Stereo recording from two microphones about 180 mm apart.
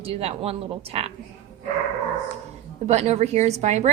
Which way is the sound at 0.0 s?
35° right (ahead or behind).